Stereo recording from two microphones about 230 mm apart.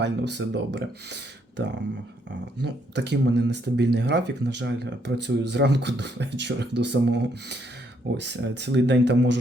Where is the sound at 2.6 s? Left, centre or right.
Right.